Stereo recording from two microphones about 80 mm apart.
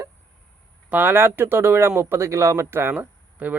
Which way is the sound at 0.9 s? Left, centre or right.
Right.